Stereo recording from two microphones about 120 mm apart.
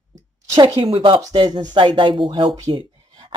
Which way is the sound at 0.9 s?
45° right (ahead or behind).